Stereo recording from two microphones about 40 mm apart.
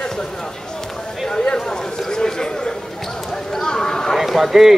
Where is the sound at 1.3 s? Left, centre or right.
Centre.